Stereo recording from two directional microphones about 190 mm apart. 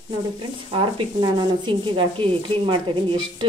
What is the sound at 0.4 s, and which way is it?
A woman's voice, 30° right (ahead or behind).